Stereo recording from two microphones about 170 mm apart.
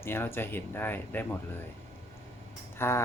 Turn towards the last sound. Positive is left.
turn(degrees=15)  # may be behind; listen again after turning